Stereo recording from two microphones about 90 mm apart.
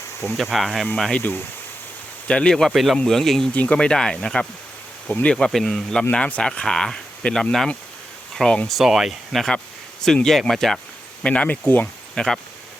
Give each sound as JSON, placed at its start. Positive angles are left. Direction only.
{"t": 0.3, "sound": "speech", "side_deg": 0}
{"t": 2.2, "sound": "speech", "side_deg": 10}
{"t": 3.5, "sound": "speech", "side_deg": 15}
{"t": 12.1, "sound": "speech", "side_deg": 5}